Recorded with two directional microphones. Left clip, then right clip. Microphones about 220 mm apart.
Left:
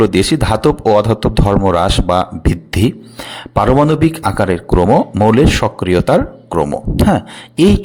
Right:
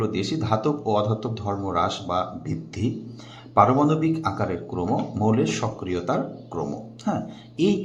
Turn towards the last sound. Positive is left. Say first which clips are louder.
# left 11 dB
turn(degrees=50)  # may be behind; listen again after turning